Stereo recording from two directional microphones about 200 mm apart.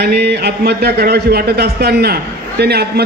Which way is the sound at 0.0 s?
55° right (ahead or behind).